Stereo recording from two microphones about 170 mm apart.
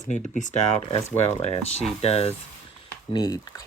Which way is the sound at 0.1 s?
45° left (ahead or behind).